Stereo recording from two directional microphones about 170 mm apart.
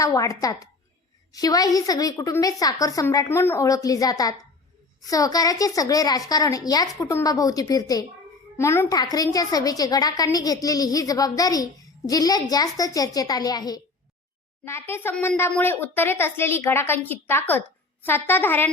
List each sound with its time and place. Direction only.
0.0 s a woman's voice: 20° left (ahead or behind)